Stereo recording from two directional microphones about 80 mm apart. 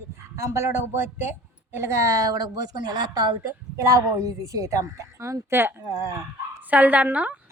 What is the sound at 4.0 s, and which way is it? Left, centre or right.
A woman's voice, right.